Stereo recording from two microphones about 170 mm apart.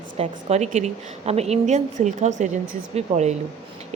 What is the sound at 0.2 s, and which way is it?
Speech, 40° right (ahead or behind).